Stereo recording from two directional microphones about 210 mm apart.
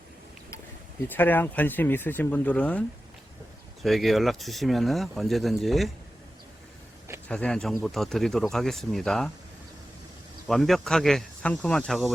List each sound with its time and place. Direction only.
1.0 s speech: 10° left (ahead or behind)
3.8 s speech: centre (ahead or behind)
7.3 s speech: 5° left (ahead or behind)
10.4 s speech: centre (ahead or behind)